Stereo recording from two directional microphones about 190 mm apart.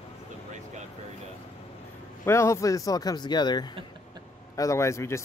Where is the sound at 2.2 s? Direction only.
15° left (ahead or behind).